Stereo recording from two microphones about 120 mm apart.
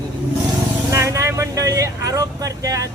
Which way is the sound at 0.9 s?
25° right (ahead or behind).